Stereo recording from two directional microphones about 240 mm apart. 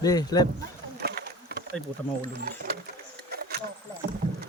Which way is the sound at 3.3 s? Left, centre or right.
Right.